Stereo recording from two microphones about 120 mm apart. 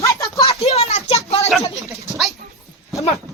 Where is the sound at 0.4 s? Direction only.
60° left (ahead or behind).